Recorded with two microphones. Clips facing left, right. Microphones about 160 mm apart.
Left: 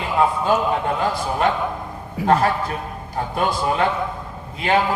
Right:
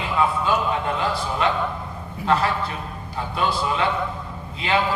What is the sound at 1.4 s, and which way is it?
A man's voice, 45° left (ahead or behind).